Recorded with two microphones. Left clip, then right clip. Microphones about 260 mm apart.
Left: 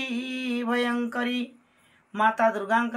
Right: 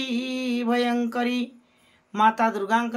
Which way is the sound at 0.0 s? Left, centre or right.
Centre.